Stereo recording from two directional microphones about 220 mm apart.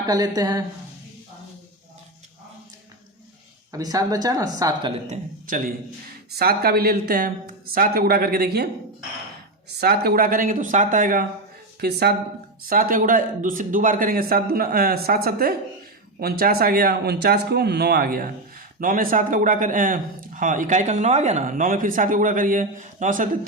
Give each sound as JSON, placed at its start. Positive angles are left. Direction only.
{"t": 0.0, "sound": "speech", "side_deg": -15}
{"t": 3.7, "sound": "speech", "side_deg": -15}
{"t": 5.0, "sound": "a man's voice", "side_deg": -35}
{"t": 9.8, "sound": "a man's voice", "side_deg": -45}